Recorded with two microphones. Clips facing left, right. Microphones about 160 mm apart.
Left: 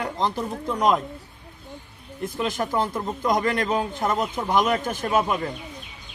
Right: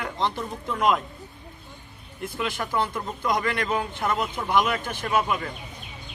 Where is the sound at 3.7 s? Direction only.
25° left (ahead or behind).